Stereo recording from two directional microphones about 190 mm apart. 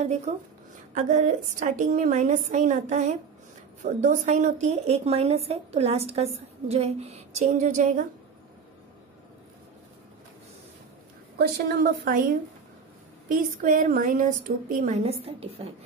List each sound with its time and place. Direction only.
0.3 s a woman's voice: 35° right (ahead or behind)
11.3 s a woman's voice: 55° right (ahead or behind)
13.6 s a woman's voice: 45° right (ahead or behind)